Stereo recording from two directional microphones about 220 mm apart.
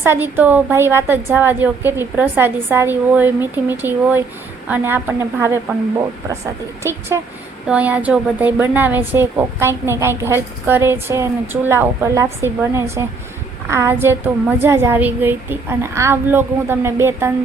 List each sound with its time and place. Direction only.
0.0 s a woman's voice: 10° right (ahead or behind)